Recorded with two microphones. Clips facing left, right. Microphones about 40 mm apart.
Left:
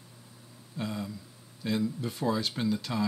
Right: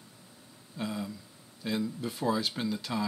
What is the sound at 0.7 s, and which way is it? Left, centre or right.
Speech, centre.